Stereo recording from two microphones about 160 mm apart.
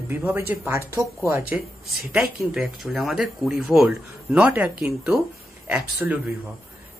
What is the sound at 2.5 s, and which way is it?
Speech, centre (ahead or behind).